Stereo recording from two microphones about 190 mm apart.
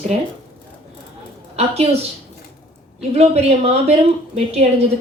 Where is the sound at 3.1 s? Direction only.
30° right (ahead or behind).